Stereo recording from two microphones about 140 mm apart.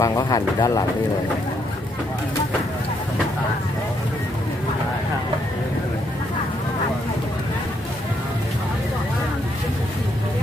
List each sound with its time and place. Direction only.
0.0 s speech: 25° left (ahead or behind)